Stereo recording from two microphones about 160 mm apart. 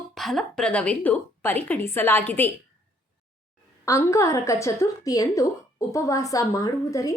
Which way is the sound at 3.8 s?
20° left (ahead or behind).